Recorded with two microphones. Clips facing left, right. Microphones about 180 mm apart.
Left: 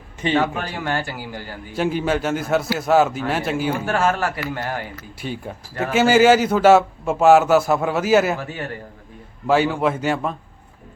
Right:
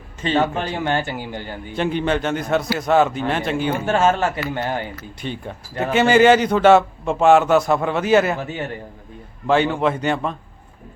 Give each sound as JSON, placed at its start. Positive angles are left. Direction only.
{"t": 0.3, "sound": "a man's voice", "side_deg": -25}
{"t": 1.7, "sound": "a man's voice", "side_deg": 5}
{"t": 3.8, "sound": "a man's voice", "side_deg": -25}
{"t": 5.2, "sound": "a man's voice", "side_deg": 5}
{"t": 8.4, "sound": "a man's voice", "side_deg": -20}
{"t": 9.5, "sound": "a man's voice", "side_deg": 5}